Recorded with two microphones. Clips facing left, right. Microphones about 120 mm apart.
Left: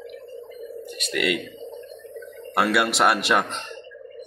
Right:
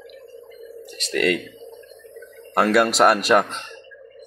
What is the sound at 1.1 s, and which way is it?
Speech, 10° left (ahead or behind).